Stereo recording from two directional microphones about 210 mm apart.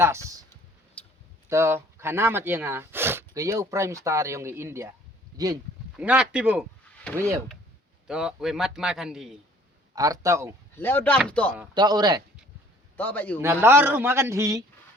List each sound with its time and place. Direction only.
1.5 s speech: 15° right (ahead or behind)
6.0 s a man's voice: 5° right (ahead or behind)
8.0 s a man's voice: 5° right (ahead or behind)
9.9 s speech: 15° right (ahead or behind)
10.8 s speech: 10° left (ahead or behind)
11.7 s speech: 20° right (ahead or behind)
13.0 s speech: 10° left (ahead or behind)
13.4 s speech: 10° right (ahead or behind)